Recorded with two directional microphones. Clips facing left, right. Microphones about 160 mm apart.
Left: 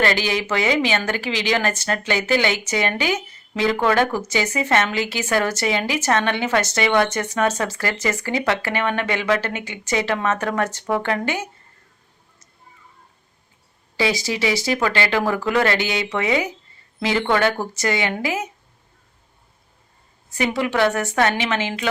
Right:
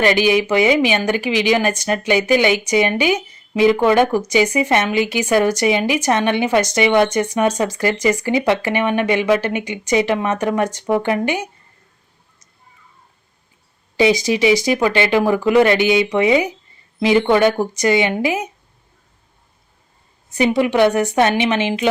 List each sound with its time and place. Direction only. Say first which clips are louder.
0.0 s a woman's voice: right 6 dB; 15° right (ahead or behind)
13.9 s a woman's voice: right 7 dB; 20° right (ahead or behind)
20.3 s a woman's voice: right 6 dB; 20° right (ahead or behind)